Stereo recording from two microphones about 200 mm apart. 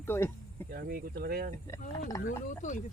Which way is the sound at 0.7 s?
50° right (ahead or behind).